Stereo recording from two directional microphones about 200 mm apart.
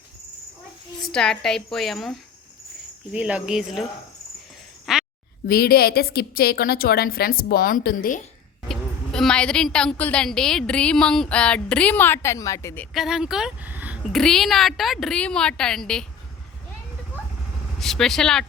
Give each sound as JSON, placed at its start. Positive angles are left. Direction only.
{"t": 1.0, "sound": "a woman's voice", "side_deg": 5}
{"t": 4.9, "sound": "a sound", "side_deg": 0}
{"t": 5.5, "sound": "a woman's voice", "side_deg": 50}
{"t": 8.6, "sound": "a woman's voice", "side_deg": 0}
{"t": 17.7, "sound": "a woman's voice", "side_deg": 0}